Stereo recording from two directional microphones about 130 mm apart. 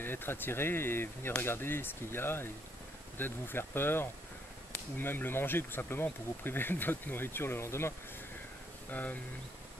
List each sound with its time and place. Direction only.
0.0 s speech: 15° left (ahead or behind)
8.9 s speech: 10° left (ahead or behind)